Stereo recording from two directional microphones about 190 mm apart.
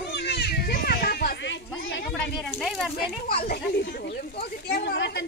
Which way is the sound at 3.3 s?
55° left (ahead or behind).